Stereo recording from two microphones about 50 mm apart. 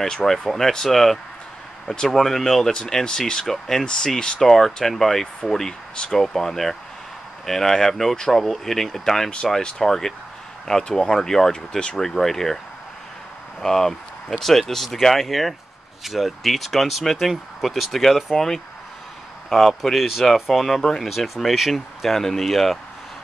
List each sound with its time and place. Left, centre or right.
0.0 s speech: centre
13.6 s speech: centre